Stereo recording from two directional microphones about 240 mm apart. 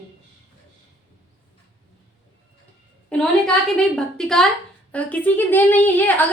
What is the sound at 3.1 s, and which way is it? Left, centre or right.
A woman's voice, centre.